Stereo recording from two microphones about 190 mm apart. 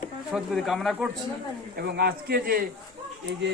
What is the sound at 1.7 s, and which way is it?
Speech, 55° right (ahead or behind).